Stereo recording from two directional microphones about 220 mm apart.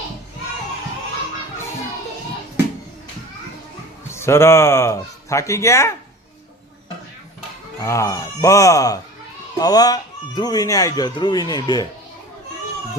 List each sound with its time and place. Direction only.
4.1 s speech: 10° left (ahead or behind)
7.9 s speech: 15° left (ahead or behind)